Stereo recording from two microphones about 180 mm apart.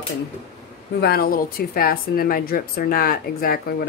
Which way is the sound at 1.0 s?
60° left (ahead or behind).